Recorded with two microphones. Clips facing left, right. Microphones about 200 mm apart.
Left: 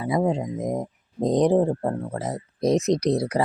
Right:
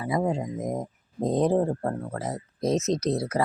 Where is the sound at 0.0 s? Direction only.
20° left (ahead or behind).